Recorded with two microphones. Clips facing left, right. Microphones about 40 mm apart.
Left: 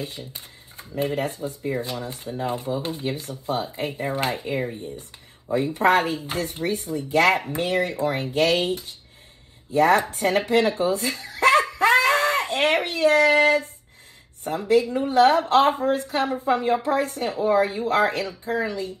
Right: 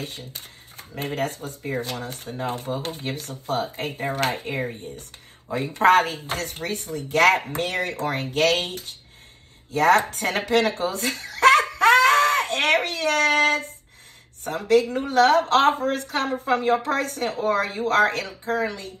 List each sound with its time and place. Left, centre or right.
0.7 s speech: right